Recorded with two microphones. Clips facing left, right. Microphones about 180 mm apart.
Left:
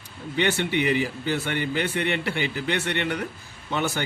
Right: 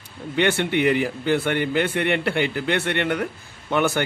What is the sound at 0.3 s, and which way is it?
A man's voice, 55° right (ahead or behind).